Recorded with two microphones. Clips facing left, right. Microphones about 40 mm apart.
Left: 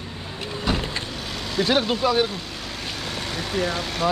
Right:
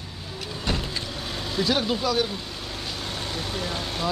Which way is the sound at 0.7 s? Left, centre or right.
Centre.